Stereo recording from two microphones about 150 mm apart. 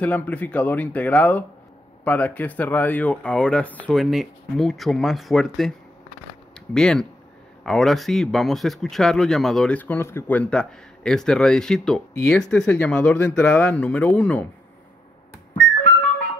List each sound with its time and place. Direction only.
0.0 s speech: 10° left (ahead or behind)